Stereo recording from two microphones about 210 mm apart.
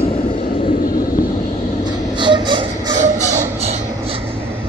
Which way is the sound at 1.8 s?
20° right (ahead or behind).